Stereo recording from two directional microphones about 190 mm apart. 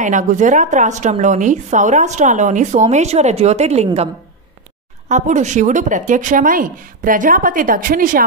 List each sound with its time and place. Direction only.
0.0 s a woman's voice: 40° right (ahead or behind)